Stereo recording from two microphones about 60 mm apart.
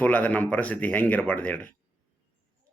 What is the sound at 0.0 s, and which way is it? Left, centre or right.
Speech, left.